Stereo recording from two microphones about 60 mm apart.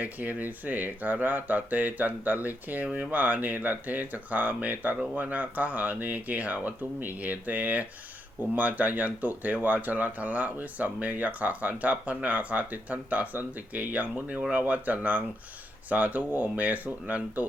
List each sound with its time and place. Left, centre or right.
0.0 s speech: right
2.8 s speech: centre